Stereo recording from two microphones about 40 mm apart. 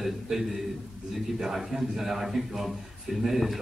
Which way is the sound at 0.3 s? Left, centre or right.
Centre.